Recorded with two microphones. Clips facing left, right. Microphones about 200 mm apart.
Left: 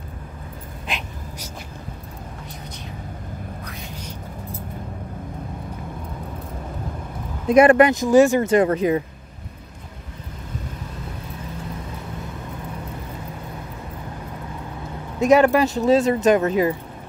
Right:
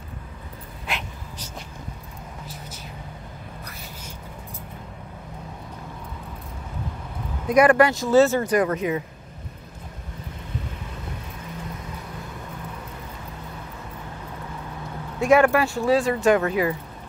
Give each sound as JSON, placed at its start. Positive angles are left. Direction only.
{"t": 0.9, "sound": "a sound", "side_deg": 15}
{"t": 3.9, "sound": "vehicle", "side_deg": -10}
{"t": 7.4, "sound": "speech", "side_deg": 25}
{"t": 15.1, "sound": "speech", "side_deg": 20}